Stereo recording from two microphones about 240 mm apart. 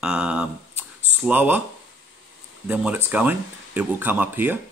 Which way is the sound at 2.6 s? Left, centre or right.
Centre.